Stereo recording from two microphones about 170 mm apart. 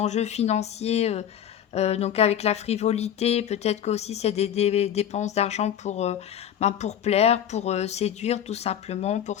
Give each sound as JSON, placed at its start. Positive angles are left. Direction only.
{"t": 0.0, "sound": "speech", "side_deg": 40}